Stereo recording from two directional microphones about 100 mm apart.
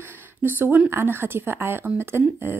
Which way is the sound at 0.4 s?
20° right (ahead or behind).